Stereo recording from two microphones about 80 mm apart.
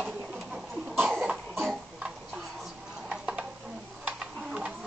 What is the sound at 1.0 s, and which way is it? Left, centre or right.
Cough, centre.